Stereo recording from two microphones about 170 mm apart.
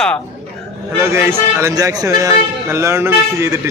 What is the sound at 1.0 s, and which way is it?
Speech, 15° right (ahead or behind).